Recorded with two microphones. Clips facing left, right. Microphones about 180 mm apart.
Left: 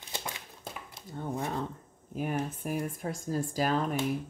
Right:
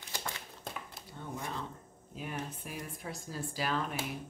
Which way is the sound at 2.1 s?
50° left (ahead or behind).